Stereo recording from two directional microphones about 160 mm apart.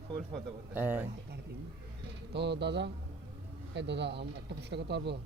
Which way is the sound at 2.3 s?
90° right.